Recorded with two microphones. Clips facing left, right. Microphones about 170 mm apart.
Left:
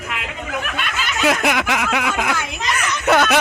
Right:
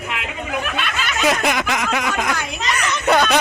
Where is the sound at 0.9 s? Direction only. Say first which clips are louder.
Left 1 dB; 5° left (ahead or behind).